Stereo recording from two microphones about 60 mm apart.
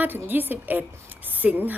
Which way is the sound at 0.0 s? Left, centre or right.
Right.